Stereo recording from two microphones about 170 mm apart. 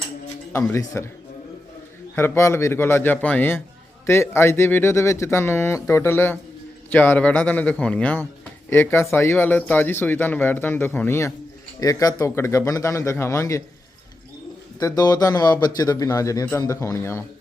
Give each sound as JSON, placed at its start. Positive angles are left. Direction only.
{"t": 0.7, "sound": "speech", "side_deg": 15}
{"t": 2.1, "sound": "speech", "side_deg": 15}
{"t": 14.8, "sound": "speech", "side_deg": 20}